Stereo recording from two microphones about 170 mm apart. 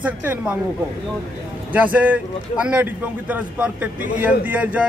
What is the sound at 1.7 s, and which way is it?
A man's voice, 10° right (ahead or behind).